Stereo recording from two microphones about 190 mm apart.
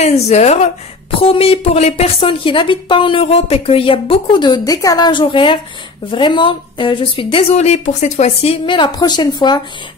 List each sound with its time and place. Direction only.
0.0 s a woman's voice: 35° left (ahead or behind)